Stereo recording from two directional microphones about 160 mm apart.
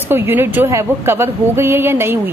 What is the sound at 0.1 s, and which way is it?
A woman's voice, 15° right (ahead or behind).